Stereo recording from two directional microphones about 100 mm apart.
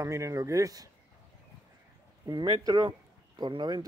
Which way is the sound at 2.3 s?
45° right (ahead or behind).